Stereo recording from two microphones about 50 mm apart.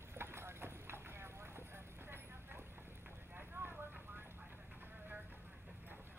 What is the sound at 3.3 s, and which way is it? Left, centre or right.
Clip-clop, right.